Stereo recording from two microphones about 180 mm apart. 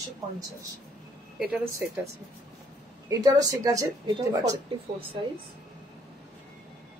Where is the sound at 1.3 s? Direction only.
5° right (ahead or behind).